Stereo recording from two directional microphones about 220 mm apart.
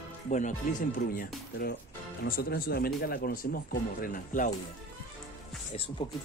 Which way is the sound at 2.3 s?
45° left (ahead or behind).